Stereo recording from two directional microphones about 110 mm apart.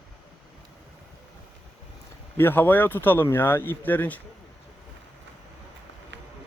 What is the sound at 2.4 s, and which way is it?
Speech, 20° left (ahead or behind).